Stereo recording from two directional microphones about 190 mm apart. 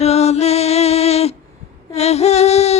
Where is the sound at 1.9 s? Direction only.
35° left (ahead or behind).